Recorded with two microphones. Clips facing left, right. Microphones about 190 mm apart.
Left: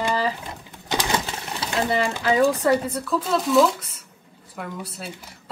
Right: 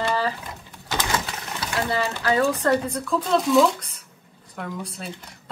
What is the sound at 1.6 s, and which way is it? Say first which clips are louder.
Sewing machine: left 2 dB; 20° left (ahead or behind).